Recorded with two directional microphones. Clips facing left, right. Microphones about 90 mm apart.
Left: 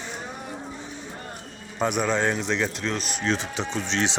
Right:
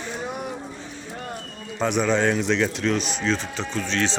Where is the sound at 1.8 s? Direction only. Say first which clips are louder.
Right 2 dB; 5° left (ahead or behind).